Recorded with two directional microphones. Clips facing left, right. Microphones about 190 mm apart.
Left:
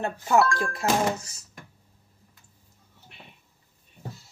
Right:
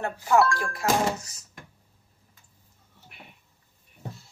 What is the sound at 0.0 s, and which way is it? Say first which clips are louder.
Speech: even; 20° left (ahead or behind).